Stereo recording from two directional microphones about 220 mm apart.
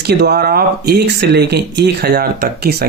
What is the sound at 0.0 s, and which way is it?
Speech, 45° right (ahead or behind).